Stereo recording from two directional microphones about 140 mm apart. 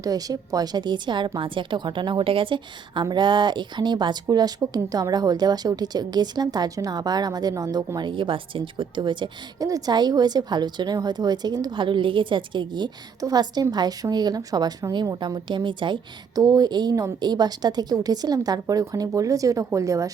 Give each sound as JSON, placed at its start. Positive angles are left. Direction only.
{"t": 0.0, "sound": "a woman's voice", "side_deg": -25}